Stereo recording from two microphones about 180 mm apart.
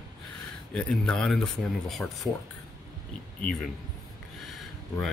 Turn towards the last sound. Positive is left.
turn(degrees=0)  # may be behind; listen again after turning